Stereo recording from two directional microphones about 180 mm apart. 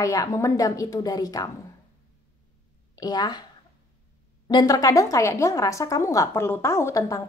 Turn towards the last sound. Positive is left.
turn(degrees=20)  # may be behind; listen again after turning